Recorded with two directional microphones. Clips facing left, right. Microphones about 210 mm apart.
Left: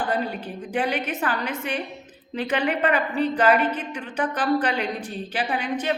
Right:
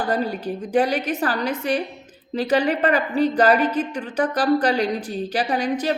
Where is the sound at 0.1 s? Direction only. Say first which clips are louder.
Right 4 dB; 40° right (ahead or behind).